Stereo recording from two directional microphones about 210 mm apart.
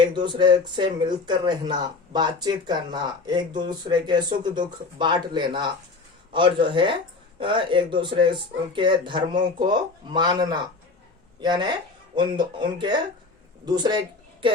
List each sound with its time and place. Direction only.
0.0 s speech: 20° right (ahead or behind)